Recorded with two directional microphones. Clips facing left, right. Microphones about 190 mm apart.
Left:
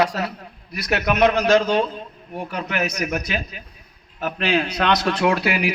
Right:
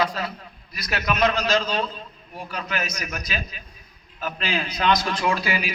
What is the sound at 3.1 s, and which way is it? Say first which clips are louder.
A man's voice: left 6 dB; 60° left (ahead or behind).